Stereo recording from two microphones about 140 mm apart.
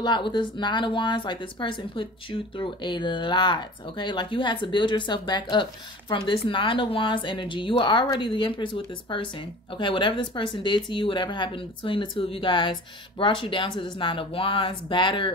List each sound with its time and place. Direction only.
0.0 s speech: 35° left (ahead or behind)